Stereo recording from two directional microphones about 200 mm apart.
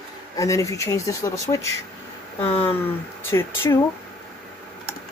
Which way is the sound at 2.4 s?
30° left (ahead or behind).